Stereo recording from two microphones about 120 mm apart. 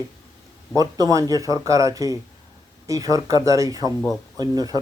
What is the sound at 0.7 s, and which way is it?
Speech, 30° right (ahead or behind).